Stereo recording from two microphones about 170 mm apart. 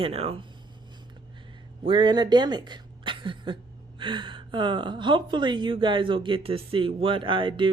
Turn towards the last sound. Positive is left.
turn(degrees=-30)  # may be behind; listen again after turning